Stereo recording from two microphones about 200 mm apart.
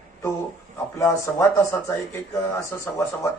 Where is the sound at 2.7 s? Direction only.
10° left (ahead or behind).